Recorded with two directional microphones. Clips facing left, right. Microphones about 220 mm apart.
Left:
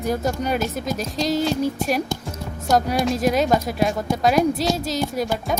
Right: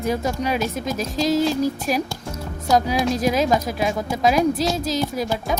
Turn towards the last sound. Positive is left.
turn(degrees=0)  # may be behind; listen again after turning